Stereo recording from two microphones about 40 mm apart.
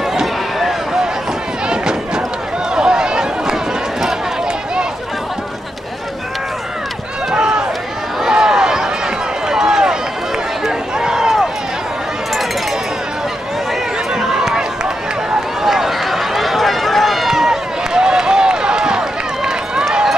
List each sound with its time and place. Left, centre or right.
1.7 s run: centre
2.7 s a sound: centre
7.3 s run: right
8.2 s a sound: centre
9.5 s run: centre
14.1 s run: centre
15.6 s run: centre